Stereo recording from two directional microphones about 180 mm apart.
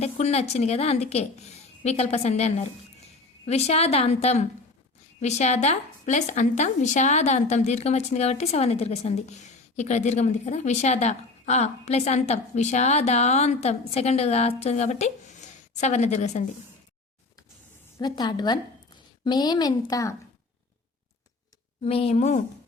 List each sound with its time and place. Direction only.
0.0 s a woman's voice: 35° left (ahead or behind)
17.9 s a woman's voice: 25° left (ahead or behind)
21.8 s a woman's voice: 35° left (ahead or behind)